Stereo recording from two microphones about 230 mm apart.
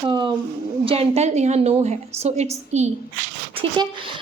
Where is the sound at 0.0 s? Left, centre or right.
Centre.